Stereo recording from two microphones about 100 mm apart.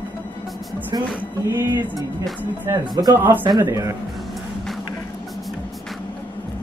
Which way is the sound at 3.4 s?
45° right (ahead or behind).